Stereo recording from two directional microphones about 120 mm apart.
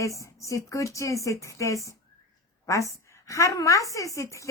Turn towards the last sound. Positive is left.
turn(degrees=25)  # may be behind; listen again after turning